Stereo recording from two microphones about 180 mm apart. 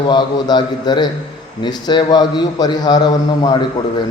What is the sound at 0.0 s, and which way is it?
A man's voice, 25° left (ahead or behind).